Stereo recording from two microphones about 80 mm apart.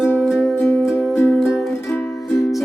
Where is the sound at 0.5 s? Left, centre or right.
Left.